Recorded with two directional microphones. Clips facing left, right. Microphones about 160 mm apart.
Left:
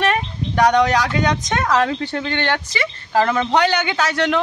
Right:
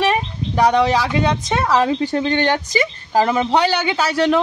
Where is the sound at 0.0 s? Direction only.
5° right (ahead or behind).